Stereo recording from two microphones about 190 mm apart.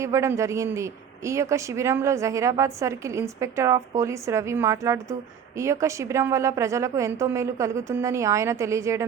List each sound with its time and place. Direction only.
0.0 s a man's voice: 15° right (ahead or behind)